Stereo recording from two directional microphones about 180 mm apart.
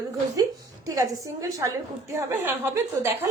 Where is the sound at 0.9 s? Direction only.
20° right (ahead or behind).